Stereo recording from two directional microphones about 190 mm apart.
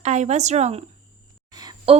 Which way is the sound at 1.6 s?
25° right (ahead or behind).